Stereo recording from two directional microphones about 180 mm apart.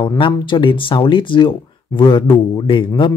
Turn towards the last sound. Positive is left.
turn(degrees=25)  # may be behind; listen again after turning